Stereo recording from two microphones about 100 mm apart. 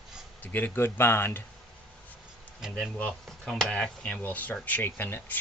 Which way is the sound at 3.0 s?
5° left (ahead or behind).